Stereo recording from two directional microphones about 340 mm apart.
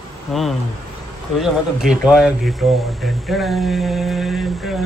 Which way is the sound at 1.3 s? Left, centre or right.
Centre.